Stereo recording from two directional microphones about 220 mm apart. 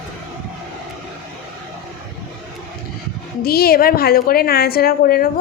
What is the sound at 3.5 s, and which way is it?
A woman's voice, 45° left (ahead or behind).